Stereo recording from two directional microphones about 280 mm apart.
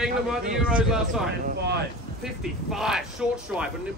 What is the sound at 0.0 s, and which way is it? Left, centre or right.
Speech, centre.